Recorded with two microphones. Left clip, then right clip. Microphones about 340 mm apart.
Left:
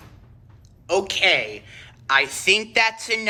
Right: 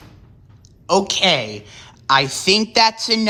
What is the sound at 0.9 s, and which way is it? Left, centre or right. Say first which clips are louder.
A woman's voice: right 3 dB; centre.